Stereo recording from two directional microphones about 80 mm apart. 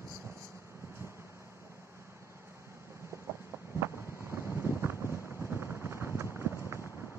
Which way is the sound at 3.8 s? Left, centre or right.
Right.